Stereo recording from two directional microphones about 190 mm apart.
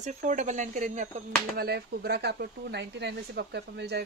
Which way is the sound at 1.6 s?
60° right (ahead or behind).